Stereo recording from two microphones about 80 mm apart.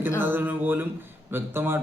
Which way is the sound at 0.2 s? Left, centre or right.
Right.